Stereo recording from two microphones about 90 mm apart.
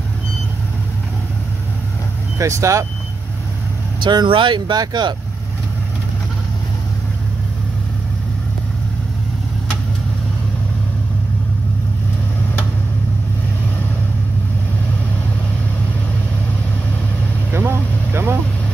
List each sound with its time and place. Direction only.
2.3 s speech: 35° right (ahead or behind)
4.0 s speech: 55° right (ahead or behind)
17.5 s vehicle: 25° right (ahead or behind)